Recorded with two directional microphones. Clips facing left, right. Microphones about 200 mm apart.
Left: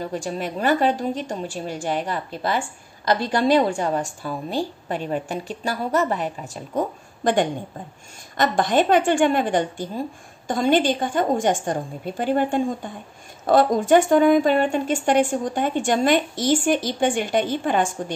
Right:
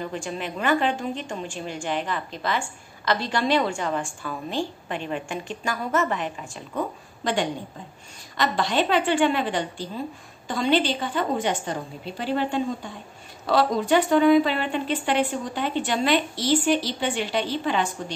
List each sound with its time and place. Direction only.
0.0 s a woman's voice: 40° left (ahead or behind)